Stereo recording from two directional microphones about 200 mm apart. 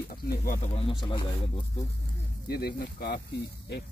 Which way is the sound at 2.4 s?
50° left (ahead or behind).